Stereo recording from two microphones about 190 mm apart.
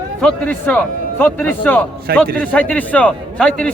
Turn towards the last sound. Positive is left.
turn(degrees=5)  # may be behind; listen again after turning